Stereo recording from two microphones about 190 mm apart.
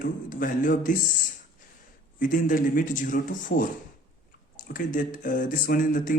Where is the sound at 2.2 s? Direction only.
45° left (ahead or behind).